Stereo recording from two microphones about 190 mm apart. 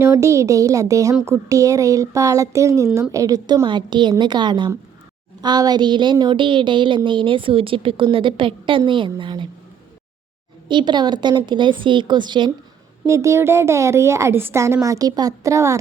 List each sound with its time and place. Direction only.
0.0 s a woman's voice: 15° right (ahead or behind)
10.7 s a woman's voice: 25° right (ahead or behind)